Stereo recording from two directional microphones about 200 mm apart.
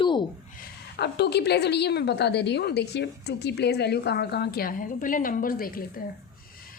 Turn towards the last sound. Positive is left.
turn(degrees=45)  # may be behind; listen again after turning